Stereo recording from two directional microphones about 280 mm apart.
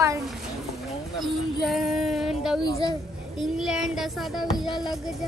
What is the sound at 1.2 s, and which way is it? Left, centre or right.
Music, centre.